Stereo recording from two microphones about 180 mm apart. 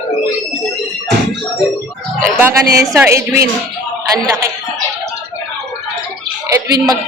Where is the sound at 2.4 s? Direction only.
15° right (ahead or behind).